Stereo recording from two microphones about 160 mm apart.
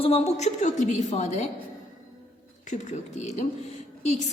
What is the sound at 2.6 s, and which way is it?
Speech, 50° left (ahead or behind).